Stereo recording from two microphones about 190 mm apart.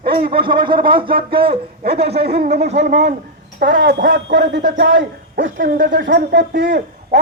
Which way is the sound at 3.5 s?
45° right (ahead or behind).